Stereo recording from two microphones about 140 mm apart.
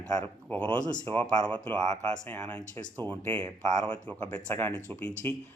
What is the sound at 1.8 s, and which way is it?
Speech, 50° right (ahead or behind).